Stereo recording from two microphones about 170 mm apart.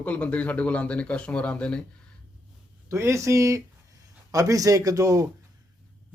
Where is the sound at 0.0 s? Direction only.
5° left (ahead or behind).